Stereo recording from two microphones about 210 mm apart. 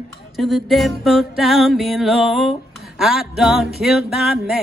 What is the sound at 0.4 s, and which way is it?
Music, centre (ahead or behind).